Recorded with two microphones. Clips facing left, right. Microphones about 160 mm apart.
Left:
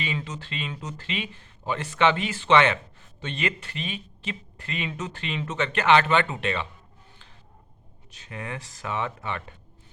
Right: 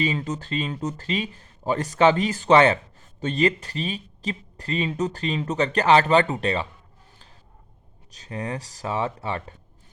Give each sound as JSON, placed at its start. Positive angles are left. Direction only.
{"t": 0.0, "sound": "speech", "side_deg": -40}
{"t": 8.1, "sound": "speech", "side_deg": -35}